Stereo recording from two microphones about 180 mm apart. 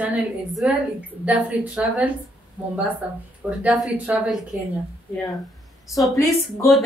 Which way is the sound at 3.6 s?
10° right (ahead or behind).